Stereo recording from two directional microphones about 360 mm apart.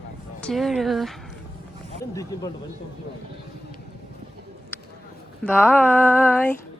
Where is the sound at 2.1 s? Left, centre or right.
Centre.